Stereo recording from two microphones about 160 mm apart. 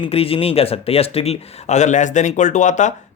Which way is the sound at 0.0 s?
35° left (ahead or behind).